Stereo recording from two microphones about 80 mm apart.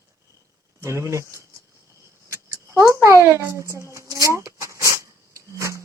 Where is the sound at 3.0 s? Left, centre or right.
Right.